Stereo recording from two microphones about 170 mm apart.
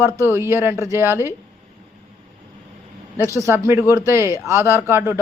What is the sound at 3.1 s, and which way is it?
Speech, 15° right (ahead or behind).